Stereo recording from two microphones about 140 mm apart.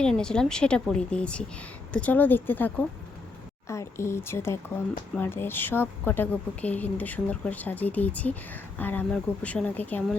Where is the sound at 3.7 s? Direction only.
20° left (ahead or behind).